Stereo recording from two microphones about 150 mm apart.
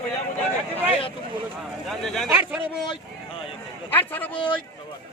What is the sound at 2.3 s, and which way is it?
Speech, 10° right (ahead or behind).